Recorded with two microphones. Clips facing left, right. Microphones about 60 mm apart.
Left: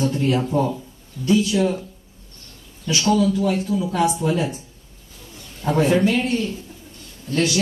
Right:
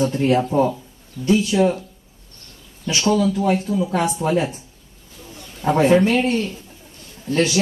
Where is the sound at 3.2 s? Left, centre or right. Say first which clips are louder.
Right 1 dB; right.